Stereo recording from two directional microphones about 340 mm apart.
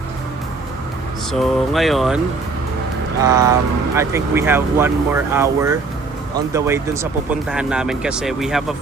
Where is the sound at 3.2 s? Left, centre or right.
Centre.